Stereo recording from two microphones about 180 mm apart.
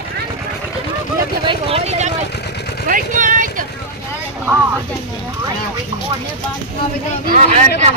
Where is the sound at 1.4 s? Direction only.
30° right (ahead or behind).